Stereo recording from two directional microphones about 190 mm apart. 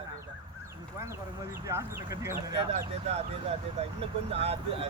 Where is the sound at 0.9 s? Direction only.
15° right (ahead or behind).